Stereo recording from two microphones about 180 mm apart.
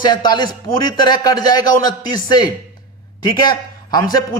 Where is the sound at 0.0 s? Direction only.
25° left (ahead or behind).